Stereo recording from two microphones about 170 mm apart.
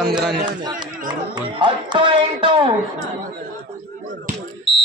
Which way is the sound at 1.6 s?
30° right (ahead or behind).